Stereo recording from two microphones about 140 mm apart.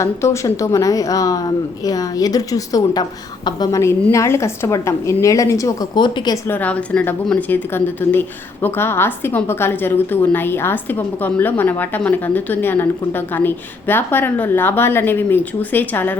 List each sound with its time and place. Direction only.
0.0 s speech: 20° left (ahead or behind)
6.5 s a woman's voice: 10° left (ahead or behind)